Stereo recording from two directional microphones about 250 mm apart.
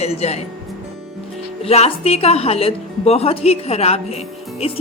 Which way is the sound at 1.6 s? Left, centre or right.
Left.